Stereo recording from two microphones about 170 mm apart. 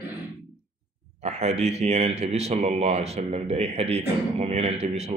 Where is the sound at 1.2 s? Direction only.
40° right (ahead or behind).